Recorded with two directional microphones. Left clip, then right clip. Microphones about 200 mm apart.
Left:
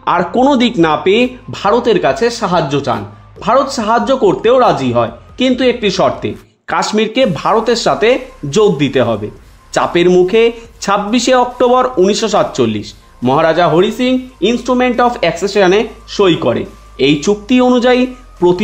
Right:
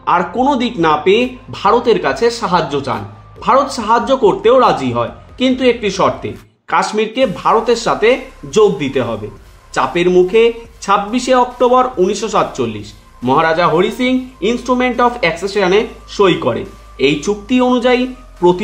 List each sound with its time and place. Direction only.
0.0 s speech: 40° left (ahead or behind)